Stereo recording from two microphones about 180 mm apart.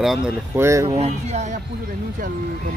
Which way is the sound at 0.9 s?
35° right (ahead or behind).